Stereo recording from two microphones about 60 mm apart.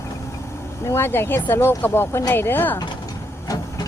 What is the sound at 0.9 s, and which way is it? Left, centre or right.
Speech, left.